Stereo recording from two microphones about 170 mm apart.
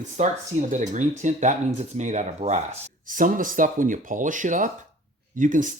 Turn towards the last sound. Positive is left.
turn(degrees=-50)  # may be behind; listen again after turning